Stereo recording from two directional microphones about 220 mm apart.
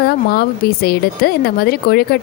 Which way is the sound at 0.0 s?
45° left (ahead or behind).